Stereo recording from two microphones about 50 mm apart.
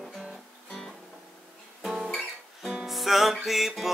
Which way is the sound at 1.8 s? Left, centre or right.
Centre.